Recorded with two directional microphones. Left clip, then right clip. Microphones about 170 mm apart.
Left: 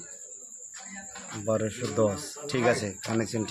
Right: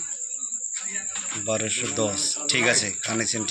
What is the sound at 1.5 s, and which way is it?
Speech, 45° left (ahead or behind).